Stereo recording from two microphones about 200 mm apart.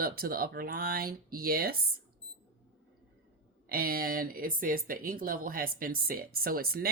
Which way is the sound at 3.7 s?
50° right (ahead or behind).